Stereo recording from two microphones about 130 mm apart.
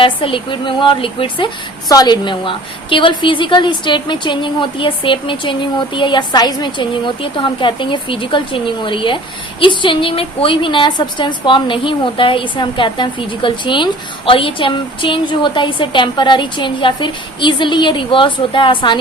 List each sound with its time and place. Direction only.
0.0 s a woman's voice: 40° left (ahead or behind)
1.9 s a woman's voice: 30° left (ahead or behind)